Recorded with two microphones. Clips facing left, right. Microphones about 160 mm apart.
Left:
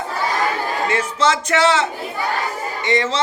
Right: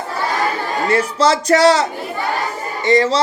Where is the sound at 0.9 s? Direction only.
35° right (ahead or behind).